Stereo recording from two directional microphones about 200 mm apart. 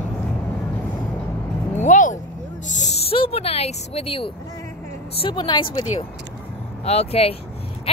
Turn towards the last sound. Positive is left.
turn(degrees=30)  # may be behind; listen again after turning